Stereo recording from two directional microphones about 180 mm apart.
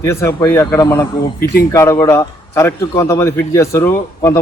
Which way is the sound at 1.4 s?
60° left (ahead or behind).